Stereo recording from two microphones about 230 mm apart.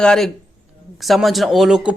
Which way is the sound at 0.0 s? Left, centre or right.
Centre.